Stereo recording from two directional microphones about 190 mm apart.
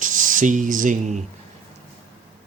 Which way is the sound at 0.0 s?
45° right (ahead or behind).